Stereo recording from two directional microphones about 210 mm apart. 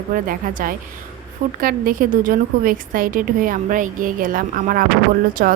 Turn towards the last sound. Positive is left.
turn(degrees=-45)  # may be behind; listen again after turning